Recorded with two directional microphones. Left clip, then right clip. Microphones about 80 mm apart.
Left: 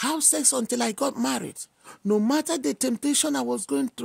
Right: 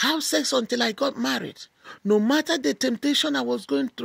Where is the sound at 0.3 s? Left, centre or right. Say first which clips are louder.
Right 3 dB; left.